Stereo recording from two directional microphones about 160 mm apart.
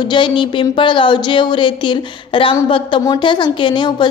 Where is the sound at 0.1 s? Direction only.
30° left (ahead or behind).